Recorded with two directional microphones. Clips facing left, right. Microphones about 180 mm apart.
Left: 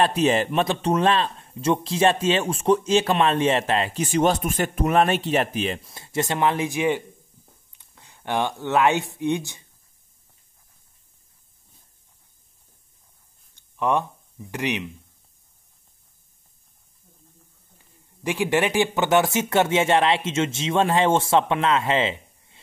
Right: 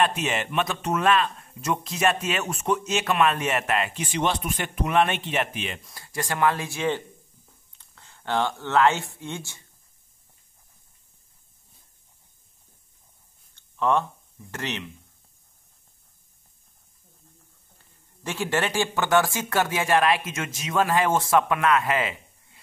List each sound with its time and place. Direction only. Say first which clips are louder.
0.0 s speech: left 5 dB; 35° left (ahead or behind)
5.9 s speech: left 2 dB; 25° left (ahead or behind)
13.6 s a sound: even; 15° left (ahead or behind)
14.5 s speech: left 6 dB; 15° left (ahead or behind)
17.7 s speech: left 5 dB; 15° left (ahead or behind)